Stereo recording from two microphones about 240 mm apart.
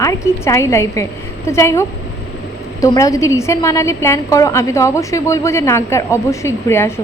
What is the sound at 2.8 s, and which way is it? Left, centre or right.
A woman's voice, centre.